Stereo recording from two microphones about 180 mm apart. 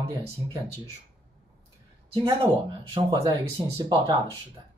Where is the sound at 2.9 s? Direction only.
25° right (ahead or behind).